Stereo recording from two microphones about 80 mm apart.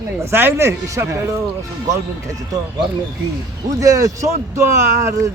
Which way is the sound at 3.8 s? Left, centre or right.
Right.